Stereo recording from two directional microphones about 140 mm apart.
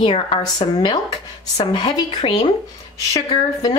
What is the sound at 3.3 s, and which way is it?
Speech, 30° left (ahead or behind).